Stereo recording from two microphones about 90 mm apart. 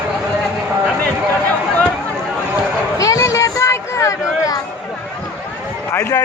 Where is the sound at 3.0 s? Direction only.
40° left (ahead or behind).